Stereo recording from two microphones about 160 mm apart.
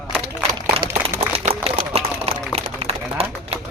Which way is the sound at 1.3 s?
40° right (ahead or behind).